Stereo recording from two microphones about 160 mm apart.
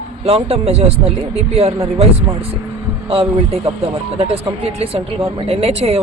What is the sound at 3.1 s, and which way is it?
Speech, 35° right (ahead or behind).